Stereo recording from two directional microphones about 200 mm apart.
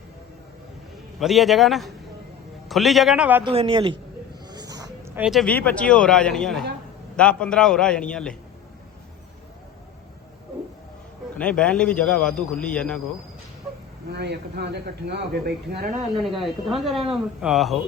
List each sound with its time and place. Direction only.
1.2 s a man's voice: centre (ahead or behind)
3.4 s a man's voice: 25° right (ahead or behind); by 8.4 s 5° left (ahead or behind)
11.3 s a man's voice: 5° left (ahead or behind)
14.1 s a man's voice: 55° right (ahead or behind)
16.1 s a man's voice: centre (ahead or behind)